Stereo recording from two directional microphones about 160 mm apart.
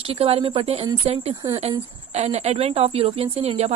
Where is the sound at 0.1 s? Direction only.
35° right (ahead or behind).